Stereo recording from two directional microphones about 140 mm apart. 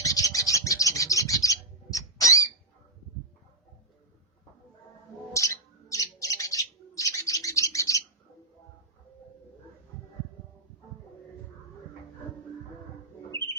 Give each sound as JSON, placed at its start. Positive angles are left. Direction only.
{"t": 0.0, "sound": "bird", "side_deg": 25}
{"t": 5.3, "sound": "bird", "side_deg": 20}